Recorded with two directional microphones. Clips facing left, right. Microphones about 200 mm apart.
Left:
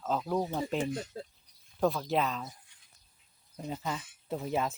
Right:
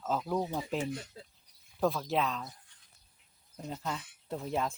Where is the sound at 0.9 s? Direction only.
50° left (ahead or behind).